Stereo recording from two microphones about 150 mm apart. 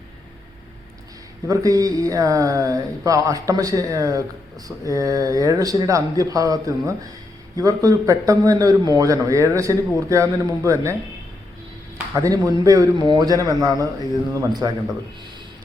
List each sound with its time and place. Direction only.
1.5 s a man's voice: 25° right (ahead or behind)
12.1 s a man's voice: 25° right (ahead or behind)